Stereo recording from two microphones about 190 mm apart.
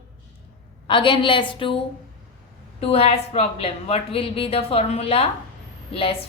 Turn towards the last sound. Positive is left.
turn(degrees=30)  # may be behind; listen again after turning